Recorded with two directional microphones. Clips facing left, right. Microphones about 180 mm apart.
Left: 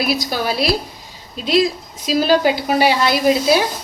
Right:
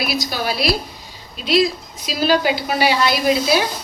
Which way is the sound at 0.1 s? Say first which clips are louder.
Left 3 dB; 45° left (ahead or behind).